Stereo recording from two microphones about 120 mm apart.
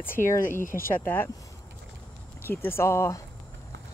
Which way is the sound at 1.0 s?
15° left (ahead or behind).